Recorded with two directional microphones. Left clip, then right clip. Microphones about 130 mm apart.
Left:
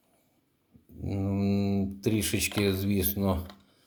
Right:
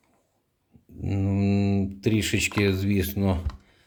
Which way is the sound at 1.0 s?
40° right (ahead or behind).